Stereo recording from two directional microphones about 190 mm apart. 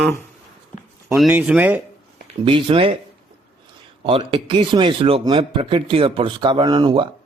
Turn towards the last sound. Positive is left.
turn(degrees=-20)  # may be behind; listen again after turning